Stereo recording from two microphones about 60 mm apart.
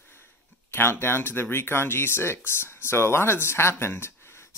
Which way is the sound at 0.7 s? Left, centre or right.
Left.